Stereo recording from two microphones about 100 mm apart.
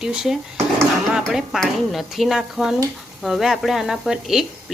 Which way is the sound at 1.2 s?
5° right (ahead or behind).